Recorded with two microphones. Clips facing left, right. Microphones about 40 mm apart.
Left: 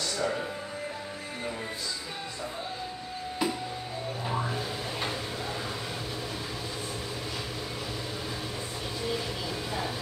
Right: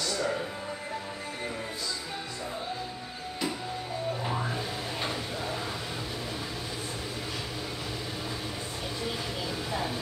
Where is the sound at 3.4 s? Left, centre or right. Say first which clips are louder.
Left 3 dB; centre.